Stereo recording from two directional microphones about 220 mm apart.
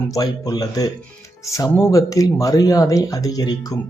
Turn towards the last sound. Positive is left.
turn(degrees=15)  # may be behind; listen again after turning